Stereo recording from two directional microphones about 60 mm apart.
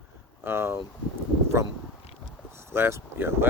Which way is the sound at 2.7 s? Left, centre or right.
Right.